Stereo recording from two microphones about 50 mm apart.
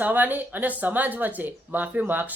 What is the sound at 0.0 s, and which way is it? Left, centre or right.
Speech, right.